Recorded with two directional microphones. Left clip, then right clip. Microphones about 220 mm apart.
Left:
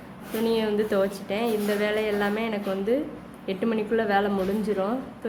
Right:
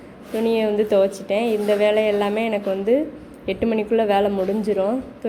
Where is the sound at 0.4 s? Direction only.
10° right (ahead or behind).